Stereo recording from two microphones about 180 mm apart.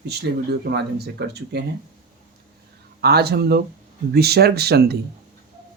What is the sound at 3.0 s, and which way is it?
Speech, 65° right (ahead or behind).